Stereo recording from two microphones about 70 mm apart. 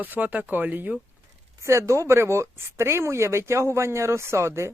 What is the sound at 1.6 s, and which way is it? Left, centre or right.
Speech, right.